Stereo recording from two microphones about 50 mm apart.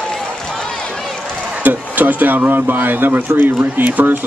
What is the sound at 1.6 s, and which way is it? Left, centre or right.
Speech, right.